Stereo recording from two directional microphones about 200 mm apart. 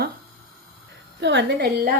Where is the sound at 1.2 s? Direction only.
60° right (ahead or behind).